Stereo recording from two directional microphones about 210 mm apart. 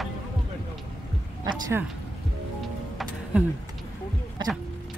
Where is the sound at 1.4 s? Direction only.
10° right (ahead or behind).